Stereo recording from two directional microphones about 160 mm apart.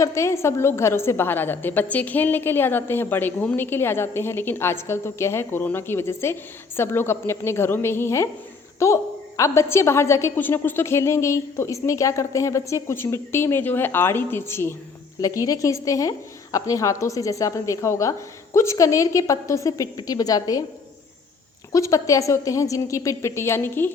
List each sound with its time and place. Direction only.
0.0 s a woman's voice: 20° left (ahead or behind)
21.7 s a woman's voice: 20° left (ahead or behind)